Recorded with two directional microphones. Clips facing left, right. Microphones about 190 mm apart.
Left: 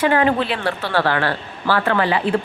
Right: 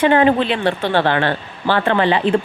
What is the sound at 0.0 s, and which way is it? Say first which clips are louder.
Speech: right 4 dB; 25° right (ahead or behind).